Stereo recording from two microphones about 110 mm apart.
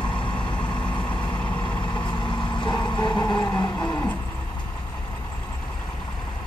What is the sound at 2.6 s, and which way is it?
Vehicle, 40° left (ahead or behind).